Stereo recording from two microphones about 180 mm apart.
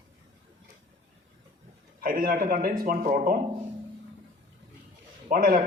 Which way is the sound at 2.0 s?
50° right (ahead or behind).